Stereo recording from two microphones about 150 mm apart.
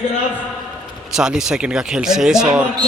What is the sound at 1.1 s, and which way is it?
Speech, 5° right (ahead or behind).